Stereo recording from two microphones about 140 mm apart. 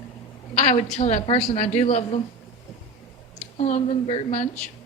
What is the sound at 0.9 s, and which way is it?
A woman's voice, 55° left (ahead or behind).